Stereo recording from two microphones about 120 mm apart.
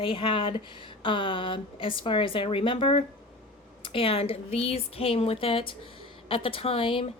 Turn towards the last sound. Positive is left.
turn(degrees=50)  # may be behind; listen again after turning